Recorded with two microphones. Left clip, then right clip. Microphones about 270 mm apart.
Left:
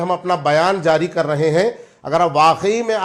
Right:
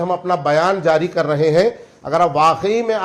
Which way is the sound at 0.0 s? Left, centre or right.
Left.